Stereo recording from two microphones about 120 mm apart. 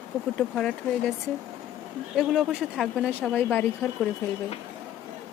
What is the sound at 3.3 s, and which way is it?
Speech, 15° left (ahead or behind).